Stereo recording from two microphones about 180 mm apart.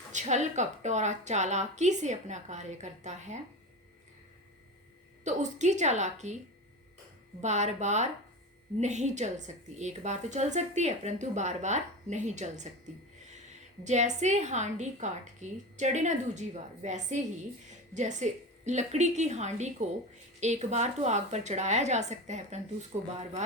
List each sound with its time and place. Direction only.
0.1 s a woman's voice: 40° right (ahead or behind)
5.2 s a woman's voice: 40° right (ahead or behind)
7.4 s a woman's voice: 40° right (ahead or behind)
13.8 s a woman's voice: 40° right (ahead or behind)